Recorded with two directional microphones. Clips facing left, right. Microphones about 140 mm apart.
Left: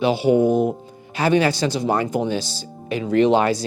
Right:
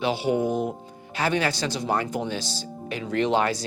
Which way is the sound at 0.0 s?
10° left (ahead or behind).